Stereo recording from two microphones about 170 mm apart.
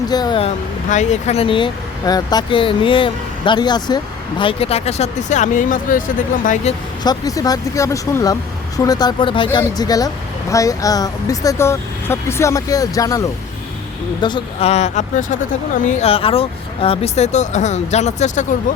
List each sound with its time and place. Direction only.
0.1 s speech: 25° left (ahead or behind)
0.9 s speech: 45° left (ahead or behind)
7.0 s speech: 20° left (ahead or behind); by 18.4 s 40° left (ahead or behind)